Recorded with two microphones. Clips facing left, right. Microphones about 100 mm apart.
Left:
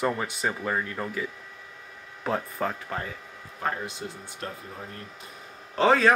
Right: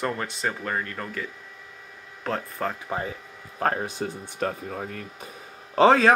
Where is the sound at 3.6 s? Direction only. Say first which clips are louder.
Right 5 dB; 60° right (ahead or behind); by 4.8 s 75° right (ahead or behind).